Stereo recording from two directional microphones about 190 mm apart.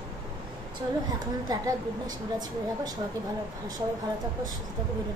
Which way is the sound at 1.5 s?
20° right (ahead or behind).